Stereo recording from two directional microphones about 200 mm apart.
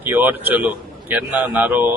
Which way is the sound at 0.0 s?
10° right (ahead or behind).